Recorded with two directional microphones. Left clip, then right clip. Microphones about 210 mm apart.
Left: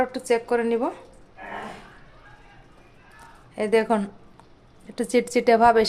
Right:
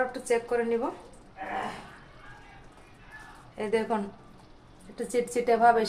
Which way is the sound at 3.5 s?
55° left (ahead or behind).